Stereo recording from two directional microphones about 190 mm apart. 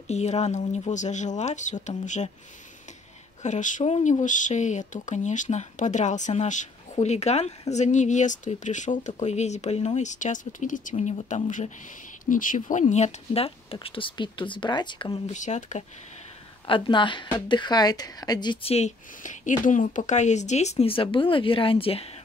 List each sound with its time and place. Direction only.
0.1 s speech: 35° left (ahead or behind)
3.4 s speech: 40° left (ahead or behind)
15.3 s speech: 40° left (ahead or behind)
16.6 s speech: 25° left (ahead or behind)